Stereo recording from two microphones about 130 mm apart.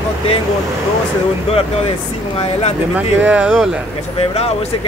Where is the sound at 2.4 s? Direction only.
55° left (ahead or behind).